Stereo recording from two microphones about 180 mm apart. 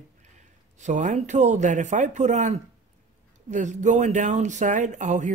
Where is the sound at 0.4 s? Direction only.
40° right (ahead or behind).